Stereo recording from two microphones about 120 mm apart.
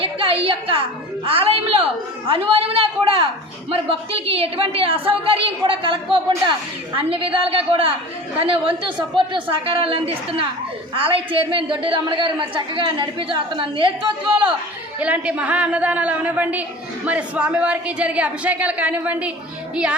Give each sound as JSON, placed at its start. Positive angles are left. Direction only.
{"t": 0.0, "sound": "a woman's voice", "side_deg": -50}
{"t": 14.9, "sound": "speech", "side_deg": -10}